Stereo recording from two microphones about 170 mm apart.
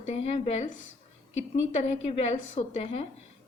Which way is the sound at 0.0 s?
40° left (ahead or behind).